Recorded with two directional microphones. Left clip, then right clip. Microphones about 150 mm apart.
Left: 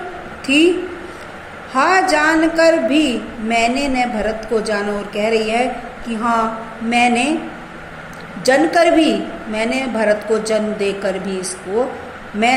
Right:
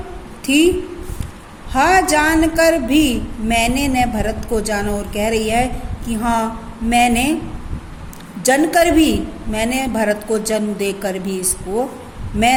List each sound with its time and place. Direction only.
0.4 s a woman's voice: 50° right (ahead or behind)
1.7 s a woman's voice: 50° right (ahead or behind)
8.4 s a woman's voice: 55° right (ahead or behind)